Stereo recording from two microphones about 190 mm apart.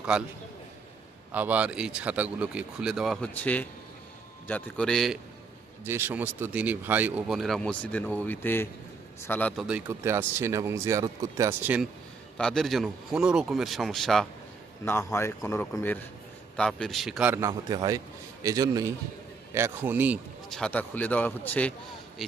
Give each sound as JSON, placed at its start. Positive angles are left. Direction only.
{"t": 0.1, "sound": "speech", "side_deg": -5}
{"t": 1.3, "sound": "speech", "side_deg": -10}
{"t": 5.8, "sound": "speech", "side_deg": -10}
{"t": 9.6, "sound": "speech", "side_deg": -5}
{"t": 12.4, "sound": "speech", "side_deg": 5}
{"t": 14.8, "sound": "a man's voice", "side_deg": 15}
{"t": 20.5, "sound": "speech", "side_deg": 5}